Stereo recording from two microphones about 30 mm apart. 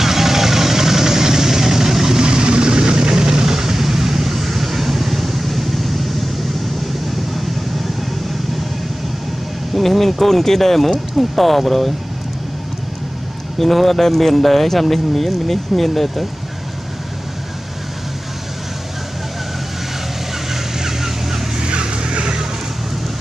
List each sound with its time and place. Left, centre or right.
0.0 s vehicle: centre
2.2 s vehicle: right; by 6.0 s centre
9.8 s speech: centre
13.6 s speech: centre
20.5 s vehicle: centre
21.5 s vehicle: right